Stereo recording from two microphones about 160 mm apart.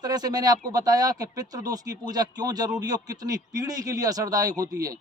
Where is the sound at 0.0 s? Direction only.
25° right (ahead or behind).